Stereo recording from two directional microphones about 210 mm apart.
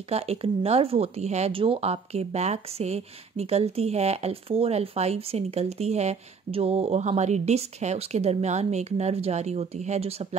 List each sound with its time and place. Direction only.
0.1 s speech: 30° right (ahead or behind)